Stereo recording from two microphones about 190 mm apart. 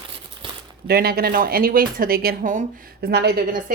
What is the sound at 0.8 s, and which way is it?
A woman's voice, 55° right (ahead or behind).